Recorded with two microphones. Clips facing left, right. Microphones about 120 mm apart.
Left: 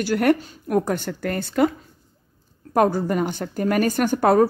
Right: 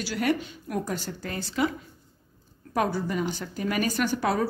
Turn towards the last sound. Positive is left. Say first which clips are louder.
# left 8 dB
turn(degrees=50)  # may be behind; listen again after turning